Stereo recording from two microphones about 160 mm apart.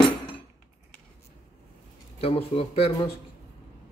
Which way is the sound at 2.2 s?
35° left (ahead or behind).